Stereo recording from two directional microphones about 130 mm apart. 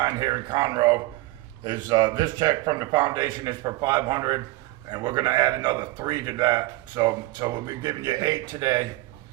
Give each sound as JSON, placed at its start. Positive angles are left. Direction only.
{"t": 0.0, "sound": "a man's voice", "side_deg": -30}